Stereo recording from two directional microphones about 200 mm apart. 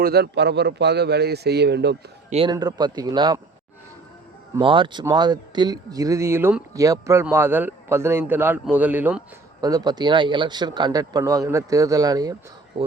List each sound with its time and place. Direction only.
0.0 s speech: 55° right (ahead or behind)
2.3 s speech: 25° right (ahead or behind)
4.5 s speech: 25° right (ahead or behind)